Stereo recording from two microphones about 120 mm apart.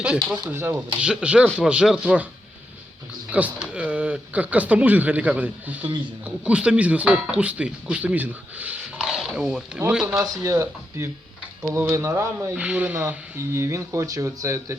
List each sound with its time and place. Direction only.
0.5 s speech: 20° right (ahead or behind)
1.0 s speech: 5° right (ahead or behind)
3.3 s speech: 10° right (ahead or behind)
10.2 s speech: 30° right (ahead or behind)
12.5 s speech: 10° right (ahead or behind); by 14.8 s 25° right (ahead or behind)